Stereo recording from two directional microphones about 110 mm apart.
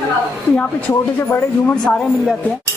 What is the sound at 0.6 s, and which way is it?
Speech, 15° left (ahead or behind).